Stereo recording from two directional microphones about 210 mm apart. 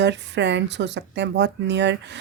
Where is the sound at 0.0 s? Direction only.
55° right (ahead or behind).